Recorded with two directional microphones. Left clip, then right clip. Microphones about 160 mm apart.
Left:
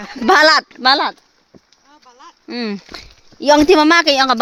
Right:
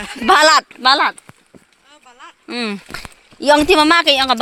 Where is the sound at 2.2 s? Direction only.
25° left (ahead or behind).